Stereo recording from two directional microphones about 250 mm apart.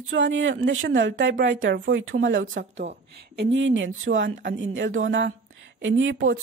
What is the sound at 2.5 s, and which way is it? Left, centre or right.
Speech, right.